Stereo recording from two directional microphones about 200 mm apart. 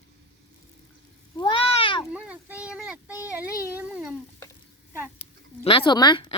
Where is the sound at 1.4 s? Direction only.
25° left (ahead or behind).